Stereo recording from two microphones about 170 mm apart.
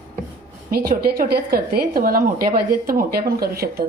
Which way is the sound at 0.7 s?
60° right (ahead or behind).